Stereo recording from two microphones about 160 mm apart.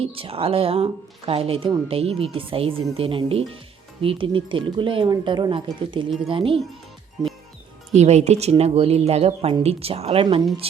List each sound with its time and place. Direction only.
0.0 s speech: 35° right (ahead or behind)
7.9 s speech: 45° right (ahead or behind)